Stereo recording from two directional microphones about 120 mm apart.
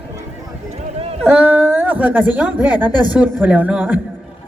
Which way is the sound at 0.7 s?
55° right (ahead or behind).